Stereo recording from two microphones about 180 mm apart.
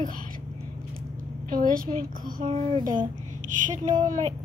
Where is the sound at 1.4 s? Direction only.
50° right (ahead or behind).